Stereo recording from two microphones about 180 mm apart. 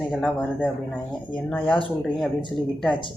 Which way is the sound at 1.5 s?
10° left (ahead or behind).